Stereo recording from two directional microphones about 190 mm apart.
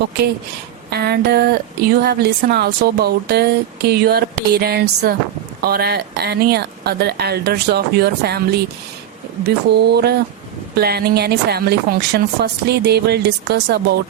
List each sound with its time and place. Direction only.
0.9 s speech: 55° right (ahead or behind)